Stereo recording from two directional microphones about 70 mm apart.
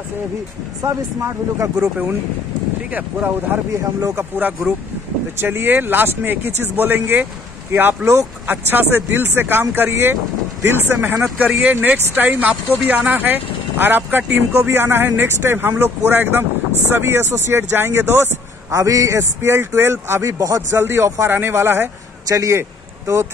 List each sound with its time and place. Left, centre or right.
0.8 s a man's voice: right
2.9 s speech: right
3.7 s a man's voice: right
4.4 s speech: right
18.7 s a man's voice: right
20.7 s speech: right
22.3 s speech: right